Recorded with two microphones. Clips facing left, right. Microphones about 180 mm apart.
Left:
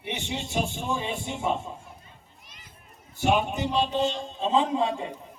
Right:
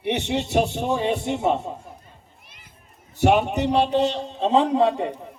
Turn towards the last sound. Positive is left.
turn(degrees=-65)  # may be behind; listen again after turning